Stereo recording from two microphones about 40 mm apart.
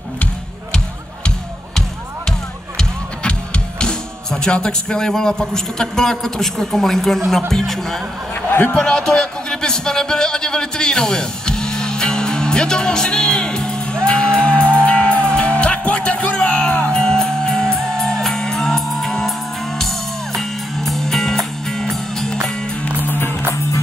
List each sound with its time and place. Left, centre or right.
3.3 s music: left
4.3 s a man's voice: left
8.5 s a man's voice: left
8.7 s speech: centre
14.0 s music: left; by 22.5 s centre
23.0 s music: left